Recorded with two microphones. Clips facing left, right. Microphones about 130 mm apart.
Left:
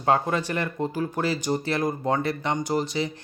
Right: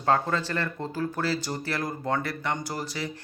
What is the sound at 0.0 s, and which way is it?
Speech, 15° left (ahead or behind).